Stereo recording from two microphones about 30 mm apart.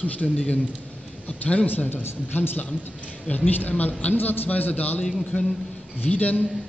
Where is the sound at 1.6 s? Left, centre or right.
Left.